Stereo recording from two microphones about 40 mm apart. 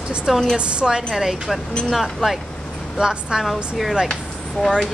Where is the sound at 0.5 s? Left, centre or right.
Right.